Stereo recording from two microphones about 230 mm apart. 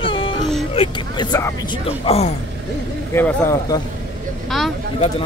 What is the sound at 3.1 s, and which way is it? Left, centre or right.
Speech, centre.